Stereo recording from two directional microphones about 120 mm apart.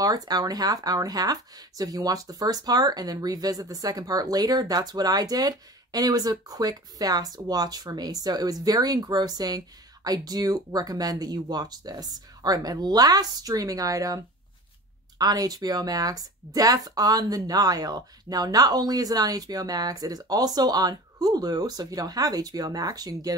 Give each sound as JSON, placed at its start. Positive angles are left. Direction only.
{"t": 0.0, "sound": "speech", "side_deg": -35}